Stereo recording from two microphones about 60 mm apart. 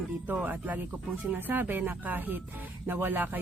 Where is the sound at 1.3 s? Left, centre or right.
Right.